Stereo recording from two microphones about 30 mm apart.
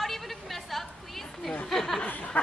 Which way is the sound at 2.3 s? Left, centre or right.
Left.